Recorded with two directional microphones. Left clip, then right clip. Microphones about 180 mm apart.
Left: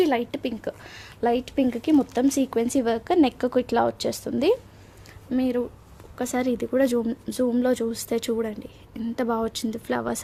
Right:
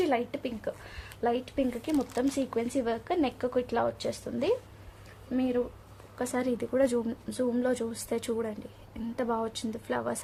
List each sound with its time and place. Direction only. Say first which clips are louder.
0.0 s speech: left 6 dB; 45° left (ahead or behind)
6.1 s speech: left 5 dB; 40° left (ahead or behind)